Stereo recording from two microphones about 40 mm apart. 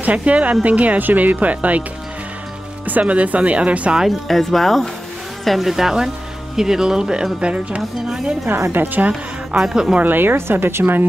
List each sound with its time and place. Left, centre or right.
0.0 s speech: right
2.9 s speech: right
4.3 s speech: centre
7.3 s speech: right
8.5 s a woman's voice: right
9.6 s speech: centre
10.0 s a woman's voice: right